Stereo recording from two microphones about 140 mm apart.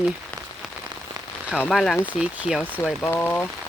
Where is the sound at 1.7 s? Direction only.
Centre (ahead or behind).